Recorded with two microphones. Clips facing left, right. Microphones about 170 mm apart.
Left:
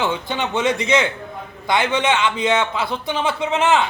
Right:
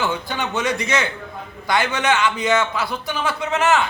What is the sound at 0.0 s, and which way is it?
A man's voice, 20° left (ahead or behind).